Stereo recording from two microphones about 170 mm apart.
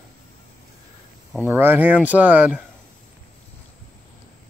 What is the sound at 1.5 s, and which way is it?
Speech, 10° right (ahead or behind).